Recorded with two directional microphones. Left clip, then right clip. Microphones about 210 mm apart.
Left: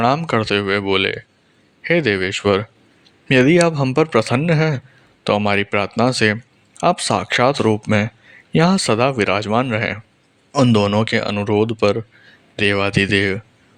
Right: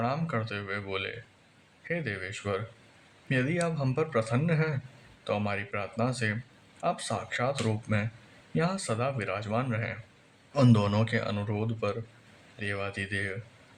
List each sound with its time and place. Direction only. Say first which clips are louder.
0.0 s speech: left 15 dB; 45° left (ahead or behind)